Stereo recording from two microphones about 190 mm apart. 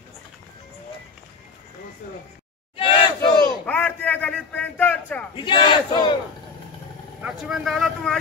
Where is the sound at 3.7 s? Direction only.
5° left (ahead or behind).